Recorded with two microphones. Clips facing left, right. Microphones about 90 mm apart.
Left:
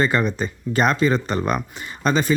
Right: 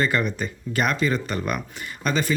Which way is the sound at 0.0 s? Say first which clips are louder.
Left 3 dB; 25° left (ahead or behind).